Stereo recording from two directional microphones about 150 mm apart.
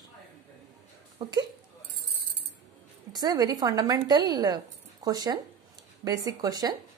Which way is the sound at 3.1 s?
25° right (ahead or behind).